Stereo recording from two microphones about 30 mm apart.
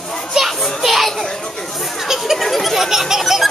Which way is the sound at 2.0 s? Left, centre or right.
Centre.